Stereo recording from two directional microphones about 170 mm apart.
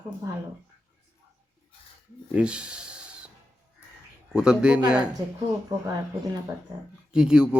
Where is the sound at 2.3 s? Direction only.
5° right (ahead or behind).